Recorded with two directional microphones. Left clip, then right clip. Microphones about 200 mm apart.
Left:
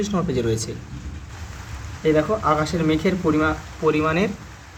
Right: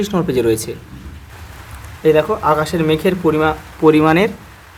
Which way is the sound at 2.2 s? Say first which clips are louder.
Right 5 dB; 30° right (ahead or behind).